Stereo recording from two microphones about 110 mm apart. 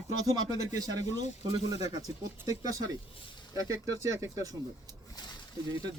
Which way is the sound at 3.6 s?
30° right (ahead or behind).